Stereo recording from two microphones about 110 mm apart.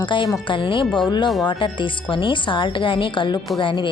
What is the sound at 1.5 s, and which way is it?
A woman's voice, 45° left (ahead or behind).